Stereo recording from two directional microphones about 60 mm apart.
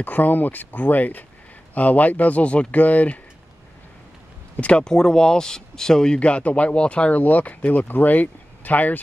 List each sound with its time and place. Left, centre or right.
0.0 s speech: left
4.6 s speech: centre